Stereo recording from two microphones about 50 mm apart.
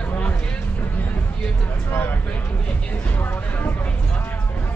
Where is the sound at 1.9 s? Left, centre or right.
Left.